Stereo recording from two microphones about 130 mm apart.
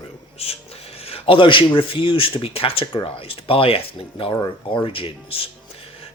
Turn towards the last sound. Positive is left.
turn(degrees=45)  # may be behind; listen again after turning